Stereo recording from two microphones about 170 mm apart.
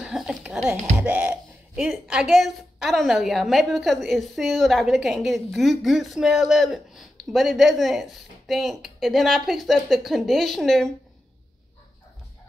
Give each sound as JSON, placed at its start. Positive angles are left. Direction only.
{"t": 0.0, "sound": "speech", "side_deg": -5}